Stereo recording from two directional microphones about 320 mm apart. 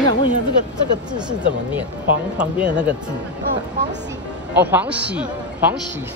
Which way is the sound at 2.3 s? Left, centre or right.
Centre.